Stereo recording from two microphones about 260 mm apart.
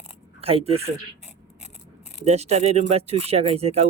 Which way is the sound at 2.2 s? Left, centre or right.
Right.